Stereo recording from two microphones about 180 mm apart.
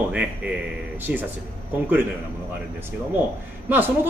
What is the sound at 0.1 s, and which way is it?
A man's voice, 5° right (ahead or behind).